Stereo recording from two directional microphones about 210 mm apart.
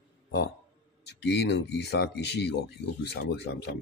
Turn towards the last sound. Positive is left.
turn(degrees=50)  # may be behind; listen again after turning